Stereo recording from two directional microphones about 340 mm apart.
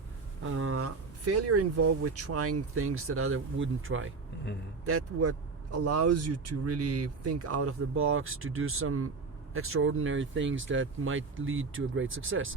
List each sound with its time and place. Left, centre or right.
0.4 s speech: right